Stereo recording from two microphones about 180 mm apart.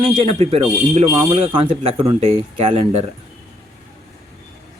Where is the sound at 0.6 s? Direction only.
15° right (ahead or behind).